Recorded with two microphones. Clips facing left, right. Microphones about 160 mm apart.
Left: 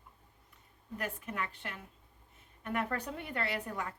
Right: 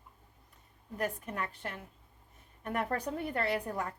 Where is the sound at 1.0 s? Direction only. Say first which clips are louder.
Right 3 dB; 40° right (ahead or behind).